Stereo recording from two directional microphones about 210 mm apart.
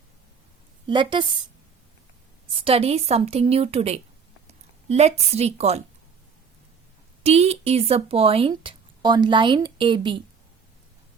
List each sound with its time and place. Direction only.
0.9 s speech: 20° right (ahead or behind)
2.6 s a woman's voice: 25° right (ahead or behind)
7.2 s speech: 30° right (ahead or behind)